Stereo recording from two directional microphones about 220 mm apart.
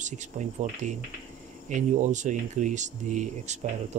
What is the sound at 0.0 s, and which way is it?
Speech, 35° right (ahead or behind).